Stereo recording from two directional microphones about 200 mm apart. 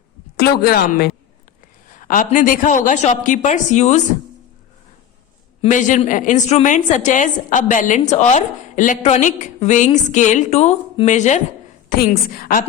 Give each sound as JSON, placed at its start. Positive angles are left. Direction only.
{"t": 0.3, "sound": "a woman's voice", "side_deg": 50}
{"t": 5.6, "sound": "a woman's voice", "side_deg": 40}
{"t": 11.9, "sound": "a woman's voice", "side_deg": 45}